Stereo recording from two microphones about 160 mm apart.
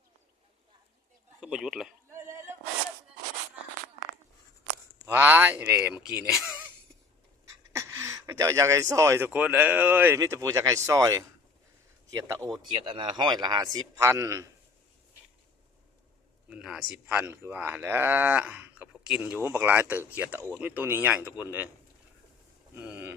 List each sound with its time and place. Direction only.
1.4 s speech: 5° right (ahead or behind)
2.0 s a sound: 20° right (ahead or behind)
5.0 s speech: 10° right (ahead or behind)
7.4 s speech: 20° right (ahead or behind)
10.2 s a man's voice: 20° right (ahead or behind)
16.5 s speech: 5° right (ahead or behind)
22.7 s a sound: 10° right (ahead or behind)